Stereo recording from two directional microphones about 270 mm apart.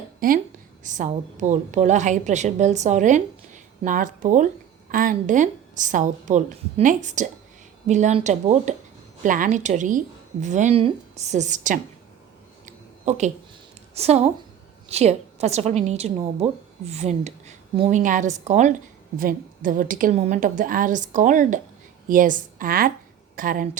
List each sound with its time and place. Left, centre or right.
0.2 s a woman's voice: right
12.6 s a sound: right
13.9 s a woman's voice: right